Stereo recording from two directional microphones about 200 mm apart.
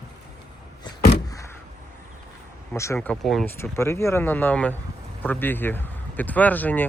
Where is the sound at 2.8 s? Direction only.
15° left (ahead or behind).